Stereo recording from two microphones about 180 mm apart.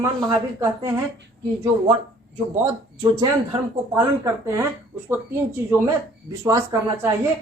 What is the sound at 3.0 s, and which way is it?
Speech, 20° right (ahead or behind).